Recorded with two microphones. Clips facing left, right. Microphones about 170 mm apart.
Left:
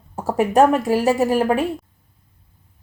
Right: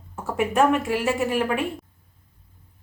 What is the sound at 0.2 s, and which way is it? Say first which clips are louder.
A woman's voice: left 5 dB; 35° left (ahead or behind).